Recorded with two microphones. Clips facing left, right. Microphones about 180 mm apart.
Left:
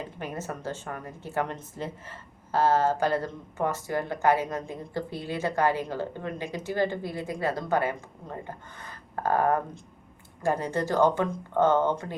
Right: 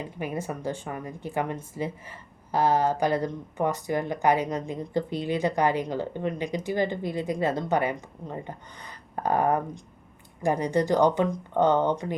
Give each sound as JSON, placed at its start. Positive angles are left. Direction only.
{"t": 0.2, "sound": "speech", "side_deg": -10}